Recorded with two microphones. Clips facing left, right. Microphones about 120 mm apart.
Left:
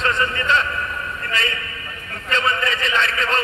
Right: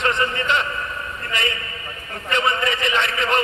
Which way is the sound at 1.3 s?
20° right (ahead or behind).